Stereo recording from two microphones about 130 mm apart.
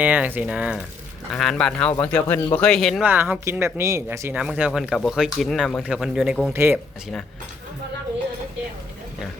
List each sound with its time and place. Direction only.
0.0 s speech: 15° right (ahead or behind)
1.3 s speech: 5° left (ahead or behind)
3.0 s speech: 15° right (ahead or behind)
4.4 s speech: 10° right (ahead or behind)
6.5 s speech: 20° right (ahead or behind)